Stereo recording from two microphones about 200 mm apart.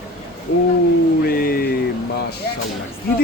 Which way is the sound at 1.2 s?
50° left (ahead or behind).